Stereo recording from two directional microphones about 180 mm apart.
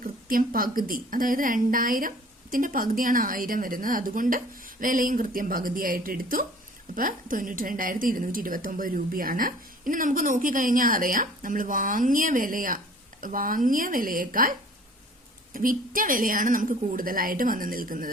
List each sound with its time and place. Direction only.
0.0 s a woman's voice: 50° right (ahead or behind)
15.5 s a woman's voice: 50° right (ahead or behind)